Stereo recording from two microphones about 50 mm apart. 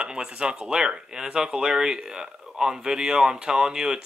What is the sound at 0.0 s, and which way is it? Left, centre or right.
Speech, centre.